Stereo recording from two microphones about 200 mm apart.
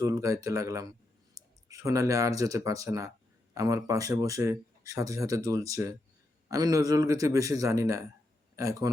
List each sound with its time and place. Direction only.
0.0 s speech: 15° right (ahead or behind)